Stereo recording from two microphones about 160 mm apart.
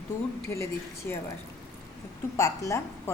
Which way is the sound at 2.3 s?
20° left (ahead or behind).